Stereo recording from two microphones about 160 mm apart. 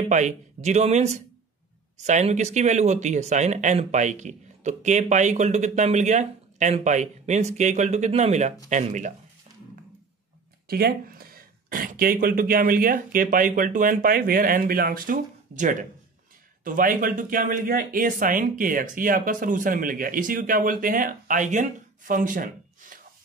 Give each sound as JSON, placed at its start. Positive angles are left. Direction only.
{"t": 0.1, "sound": "speech", "side_deg": -45}
{"t": 10.7, "sound": "speech", "side_deg": -70}